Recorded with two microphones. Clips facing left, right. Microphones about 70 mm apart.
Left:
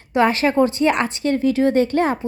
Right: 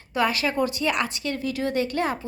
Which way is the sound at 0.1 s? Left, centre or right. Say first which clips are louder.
Left 7 dB; left.